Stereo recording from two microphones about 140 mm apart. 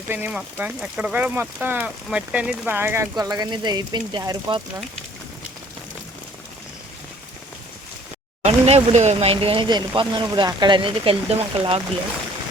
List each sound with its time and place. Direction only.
0.1 s speech: 10° right (ahead or behind); by 4.6 s 30° right (ahead or behind)
8.4 s speech: 50° right (ahead or behind)